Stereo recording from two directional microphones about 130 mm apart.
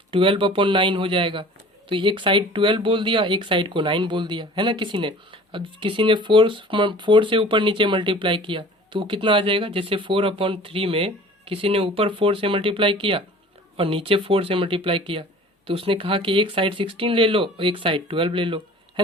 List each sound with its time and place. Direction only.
0.1 s speech: 40° right (ahead or behind)